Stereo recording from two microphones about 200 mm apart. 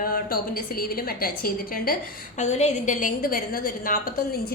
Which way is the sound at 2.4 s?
35° left (ahead or behind).